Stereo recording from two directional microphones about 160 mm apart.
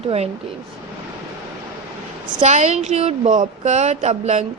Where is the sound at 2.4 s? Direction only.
45° right (ahead or behind).